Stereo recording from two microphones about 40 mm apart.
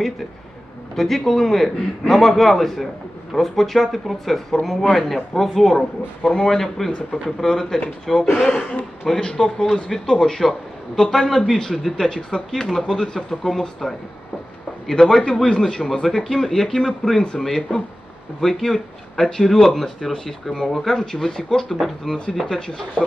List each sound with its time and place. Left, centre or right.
0.9 s a man's voice: centre
5.8 s a man's voice: centre
21.7 s a man's voice: centre
22.7 s speech: centre